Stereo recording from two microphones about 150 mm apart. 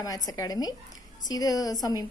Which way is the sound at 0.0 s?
25° left (ahead or behind).